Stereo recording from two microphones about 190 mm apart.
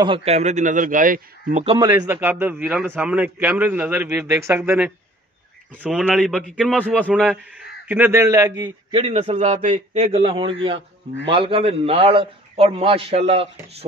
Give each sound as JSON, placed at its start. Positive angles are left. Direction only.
{"t": 0.0, "sound": "a man's voice", "side_deg": -30}
{"t": 1.8, "sound": "a man's voice", "side_deg": -15}
{"t": 7.9, "sound": "a man's voice", "side_deg": -10}